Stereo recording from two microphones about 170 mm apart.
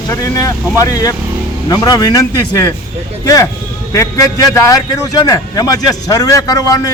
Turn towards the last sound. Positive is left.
turn(degrees=20)  # may be behind; listen again after turning